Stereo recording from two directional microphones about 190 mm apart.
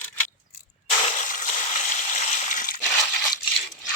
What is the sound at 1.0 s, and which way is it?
Water, 35° left (ahead or behind).